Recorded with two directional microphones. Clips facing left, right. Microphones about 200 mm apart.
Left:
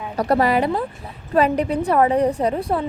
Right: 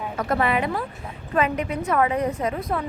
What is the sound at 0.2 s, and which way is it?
A woman's voice, 35° left (ahead or behind).